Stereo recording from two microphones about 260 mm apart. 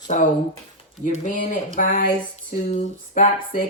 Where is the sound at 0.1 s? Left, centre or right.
Left.